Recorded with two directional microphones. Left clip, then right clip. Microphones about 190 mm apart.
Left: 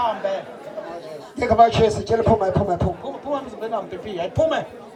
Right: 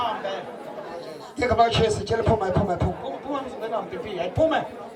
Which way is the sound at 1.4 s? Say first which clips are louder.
Left 5 dB; 25° left (ahead or behind).